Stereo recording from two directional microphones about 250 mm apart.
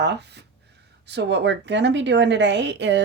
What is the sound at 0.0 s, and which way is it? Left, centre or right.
A woman's voice, right.